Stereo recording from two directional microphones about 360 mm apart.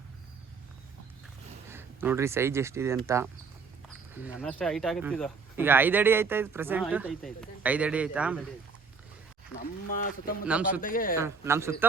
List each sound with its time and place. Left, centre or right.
1.7 s speech: centre
9.6 s speech: left
10.4 s speech: centre
10.8 s speech: left
11.2 s speech: centre